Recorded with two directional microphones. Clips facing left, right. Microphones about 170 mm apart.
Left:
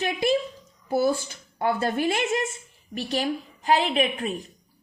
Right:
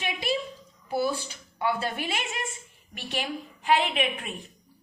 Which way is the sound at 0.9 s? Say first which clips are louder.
Left 5 dB; 45° left (ahead or behind).